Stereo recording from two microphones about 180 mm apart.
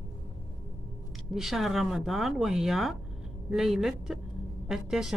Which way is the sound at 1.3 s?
Centre (ahead or behind).